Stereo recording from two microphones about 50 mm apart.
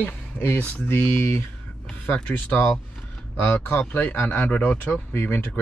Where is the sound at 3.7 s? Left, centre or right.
Left.